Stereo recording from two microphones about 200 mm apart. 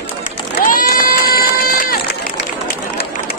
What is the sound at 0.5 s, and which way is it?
Run, 45° left (ahead or behind).